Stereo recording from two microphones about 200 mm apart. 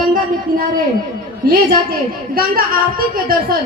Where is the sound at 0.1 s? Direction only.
45° right (ahead or behind).